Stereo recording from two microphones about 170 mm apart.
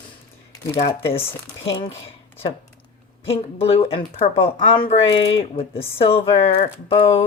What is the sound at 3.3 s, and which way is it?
Speech, 35° left (ahead or behind).